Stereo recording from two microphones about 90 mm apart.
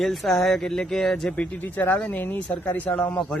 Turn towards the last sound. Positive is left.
turn(degrees=15)  # may be behind; listen again after turning